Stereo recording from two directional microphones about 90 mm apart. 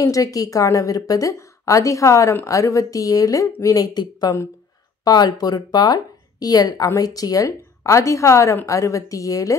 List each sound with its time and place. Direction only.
0.0 s a woman's voice: 40° left (ahead or behind)